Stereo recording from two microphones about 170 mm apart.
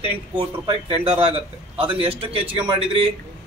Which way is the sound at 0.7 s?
30° right (ahead or behind).